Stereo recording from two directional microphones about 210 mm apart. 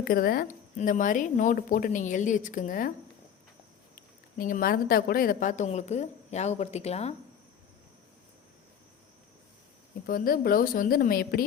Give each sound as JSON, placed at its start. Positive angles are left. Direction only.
{"t": 0.0, "sound": "speech", "side_deg": 45}
{"t": 4.4, "sound": "speech", "side_deg": 40}
{"t": 10.1, "sound": "a woman's voice", "side_deg": 45}